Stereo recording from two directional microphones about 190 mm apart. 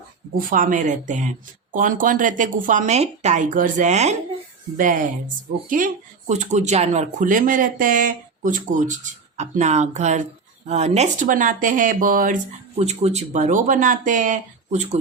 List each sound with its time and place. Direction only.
0.3 s speech: 45° right (ahead or behind)